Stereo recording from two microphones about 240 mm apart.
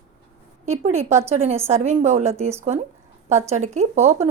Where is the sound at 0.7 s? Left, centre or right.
Right.